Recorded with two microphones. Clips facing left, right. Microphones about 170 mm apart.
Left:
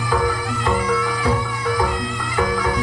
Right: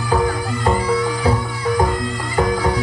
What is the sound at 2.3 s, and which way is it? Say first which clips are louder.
Bagpipes: right 2 dB; 35° right (ahead or behind).